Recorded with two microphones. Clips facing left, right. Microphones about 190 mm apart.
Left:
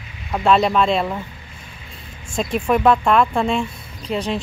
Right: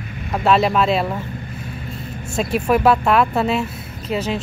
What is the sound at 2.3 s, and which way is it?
Speech, 5° right (ahead or behind).